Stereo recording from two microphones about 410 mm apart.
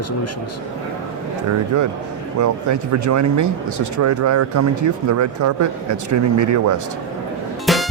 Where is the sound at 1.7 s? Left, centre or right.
Right.